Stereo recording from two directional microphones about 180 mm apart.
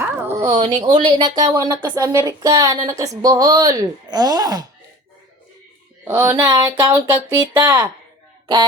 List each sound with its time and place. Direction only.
0.0 s a sound: 10° right (ahead or behind)
0.8 s speech: 25° right (ahead or behind)
6.1 s speech: 10° right (ahead or behind)